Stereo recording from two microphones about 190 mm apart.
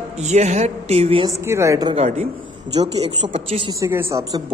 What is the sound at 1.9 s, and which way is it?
Speech, 35° right (ahead or behind).